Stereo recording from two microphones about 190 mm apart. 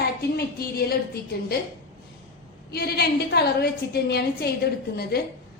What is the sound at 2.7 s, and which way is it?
A woman's voice, 55° left (ahead or behind).